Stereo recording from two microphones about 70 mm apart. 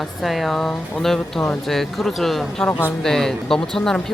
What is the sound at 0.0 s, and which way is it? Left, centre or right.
Speech, centre.